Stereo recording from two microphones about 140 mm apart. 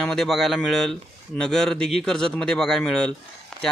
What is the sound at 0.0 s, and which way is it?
Speech, 5° left (ahead or behind).